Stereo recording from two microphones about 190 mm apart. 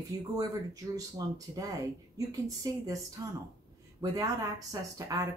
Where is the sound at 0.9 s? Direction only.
20° right (ahead or behind).